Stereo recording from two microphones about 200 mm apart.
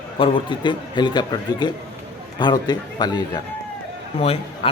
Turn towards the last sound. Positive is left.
turn(degrees=30)  # may be behind; listen again after turning